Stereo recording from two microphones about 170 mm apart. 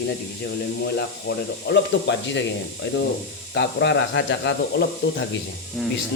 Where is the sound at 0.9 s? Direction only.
90° left.